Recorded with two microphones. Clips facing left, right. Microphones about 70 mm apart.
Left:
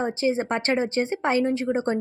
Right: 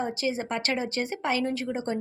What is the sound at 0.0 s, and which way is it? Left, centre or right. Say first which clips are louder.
Speech: left 5 dB; left.